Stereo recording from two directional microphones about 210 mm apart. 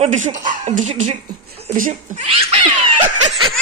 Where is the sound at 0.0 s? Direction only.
35° right (ahead or behind).